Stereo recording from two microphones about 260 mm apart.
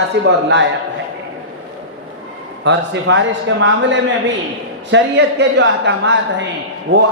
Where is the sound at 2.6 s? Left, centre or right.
Right.